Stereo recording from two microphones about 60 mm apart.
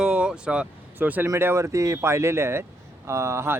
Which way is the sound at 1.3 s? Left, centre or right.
Right.